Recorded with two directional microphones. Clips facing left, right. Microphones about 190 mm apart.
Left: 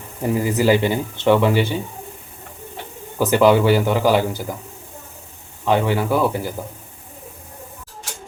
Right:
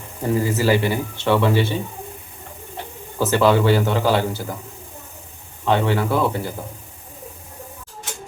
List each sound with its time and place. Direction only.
0.2 s speech: 15° left (ahead or behind)
3.2 s speech: 15° left (ahead or behind)
5.6 s speech: 15° left (ahead or behind)